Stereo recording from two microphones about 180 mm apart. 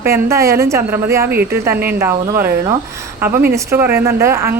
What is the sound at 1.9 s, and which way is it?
Speech, 15° right (ahead or behind).